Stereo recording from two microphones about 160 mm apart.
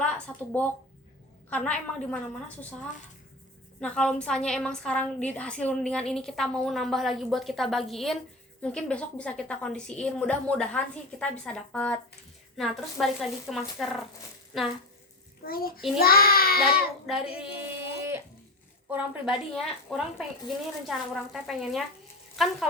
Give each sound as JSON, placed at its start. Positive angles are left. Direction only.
{"t": 0.0, "sound": "a sound", "side_deg": 10}
{"t": 1.5, "sound": "a woman's voice", "side_deg": 10}
{"t": 3.8, "sound": "a woman's voice", "side_deg": 5}
{"t": 15.4, "sound": "child singing", "side_deg": 65}
{"t": 17.1, "sound": "a woman's voice", "side_deg": -5}